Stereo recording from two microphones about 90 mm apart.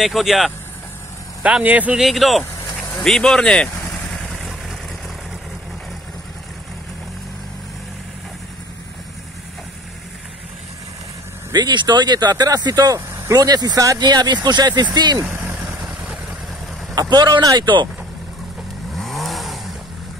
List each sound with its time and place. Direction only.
0.0 s speech: centre (ahead or behind)
1.4 s speech: 15° right (ahead or behind)
2.0 s speech: centre (ahead or behind)
2.9 s vehicle: 5° left (ahead or behind)
11.5 s speech: 55° right (ahead or behind)
14.0 s speech: 55° right (ahead or behind)
16.0 s vehicle: 15° right (ahead or behind)
16.9 s speech: 45° right (ahead or behind)
18.9 s vehicle: centre (ahead or behind)